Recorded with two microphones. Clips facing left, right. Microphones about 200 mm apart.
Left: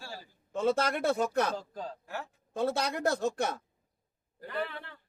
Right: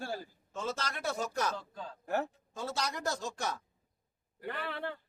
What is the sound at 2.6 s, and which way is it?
A man's voice, 55° left (ahead or behind).